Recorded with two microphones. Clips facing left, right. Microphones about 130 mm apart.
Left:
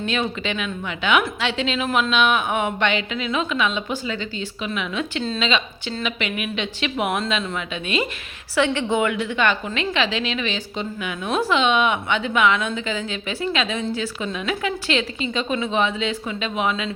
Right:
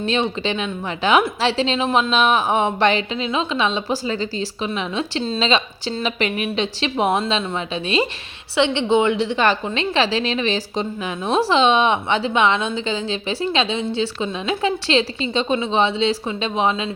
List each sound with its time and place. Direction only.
0.0 s a woman's voice: 30° right (ahead or behind)